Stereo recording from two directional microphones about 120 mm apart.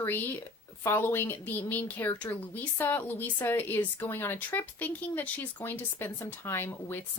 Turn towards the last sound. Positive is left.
turn(degrees=20)  # may be behind; listen again after turning